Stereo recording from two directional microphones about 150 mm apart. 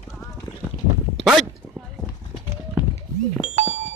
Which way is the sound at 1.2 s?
Centre (ahead or behind).